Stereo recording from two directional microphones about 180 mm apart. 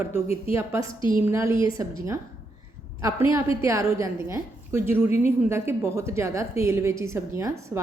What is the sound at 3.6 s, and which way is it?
A woman's voice, 15° right (ahead or behind).